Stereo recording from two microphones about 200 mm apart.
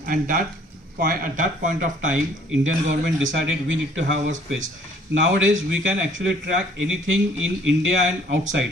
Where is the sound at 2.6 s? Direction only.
70° right (ahead or behind).